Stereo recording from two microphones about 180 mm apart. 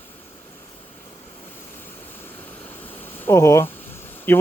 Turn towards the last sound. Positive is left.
turn(degrees=10)  # may be behind; listen again after turning